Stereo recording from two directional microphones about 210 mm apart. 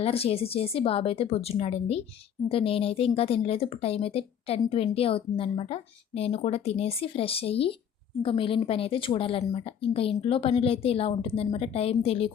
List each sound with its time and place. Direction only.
0.0 s speech: 30° left (ahead or behind)